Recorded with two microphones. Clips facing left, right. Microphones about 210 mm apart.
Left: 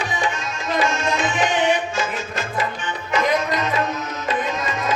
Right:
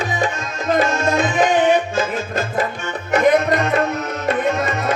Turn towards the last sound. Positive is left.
turn(degrees=-60)  # may be behind; listen again after turning